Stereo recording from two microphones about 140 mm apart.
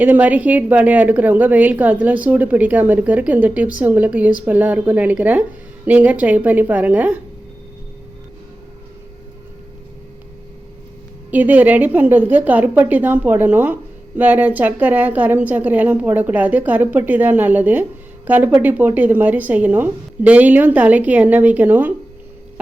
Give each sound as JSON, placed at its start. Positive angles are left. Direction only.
{"t": 0.0, "sound": "a woman's voice", "side_deg": -10}
{"t": 11.3, "sound": "a woman's voice", "side_deg": -10}